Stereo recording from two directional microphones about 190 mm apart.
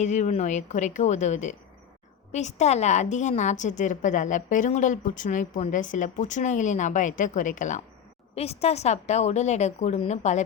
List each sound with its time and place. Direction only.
0.0 s a woman's voice: 40° left (ahead or behind)